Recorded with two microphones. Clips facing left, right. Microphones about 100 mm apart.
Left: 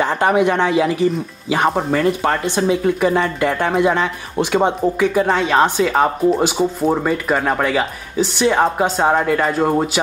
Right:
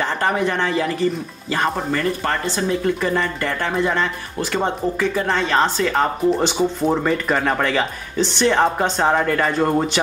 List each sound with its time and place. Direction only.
0.0 s speech: 10° left (ahead or behind)